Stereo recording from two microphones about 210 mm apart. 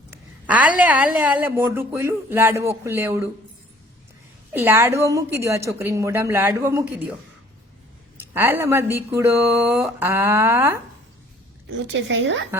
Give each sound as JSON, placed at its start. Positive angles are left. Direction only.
{"t": 0.1, "sound": "a sound", "side_deg": -5}
{"t": 0.8, "sound": "a woman's voice", "side_deg": -5}
{"t": 4.5, "sound": "a woman's voice", "side_deg": -10}
{"t": 8.3, "sound": "a woman's voice", "side_deg": -10}
{"t": 11.7, "sound": "a woman's voice", "side_deg": -60}